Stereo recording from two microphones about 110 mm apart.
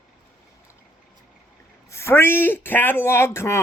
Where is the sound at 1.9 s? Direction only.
25° left (ahead or behind).